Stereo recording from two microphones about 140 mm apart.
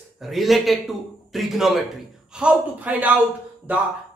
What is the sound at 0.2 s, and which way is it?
A woman's voice, centre (ahead or behind).